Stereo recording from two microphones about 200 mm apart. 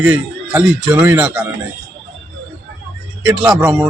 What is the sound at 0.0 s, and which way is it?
Speech, 5° right (ahead or behind).